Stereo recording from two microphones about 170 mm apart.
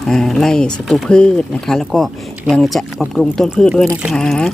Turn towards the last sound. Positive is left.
turn(degrees=5)  # may be behind; listen again after turning